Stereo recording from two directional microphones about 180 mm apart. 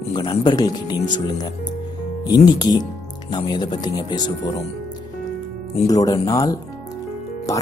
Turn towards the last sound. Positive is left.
turn(degrees=15)  # may be behind; listen again after turning